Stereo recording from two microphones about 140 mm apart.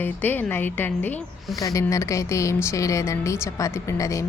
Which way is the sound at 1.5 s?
25° left (ahead or behind).